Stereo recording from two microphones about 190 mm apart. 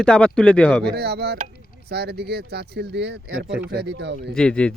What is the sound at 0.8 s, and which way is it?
Speech, 60° right (ahead or behind).